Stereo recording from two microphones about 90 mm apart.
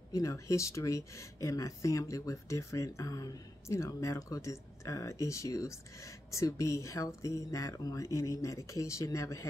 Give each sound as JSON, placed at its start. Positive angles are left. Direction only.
{"t": 0.1, "sound": "speech", "side_deg": 35}